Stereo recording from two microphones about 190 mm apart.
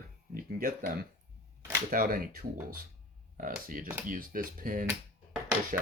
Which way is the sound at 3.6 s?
45° right (ahead or behind).